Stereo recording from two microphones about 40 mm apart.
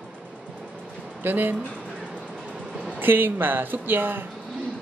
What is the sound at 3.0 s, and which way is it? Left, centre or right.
Speech, right.